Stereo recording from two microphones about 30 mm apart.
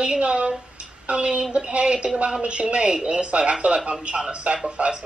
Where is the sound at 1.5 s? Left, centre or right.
Right.